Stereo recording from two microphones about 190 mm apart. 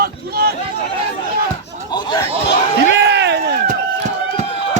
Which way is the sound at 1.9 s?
20° left (ahead or behind).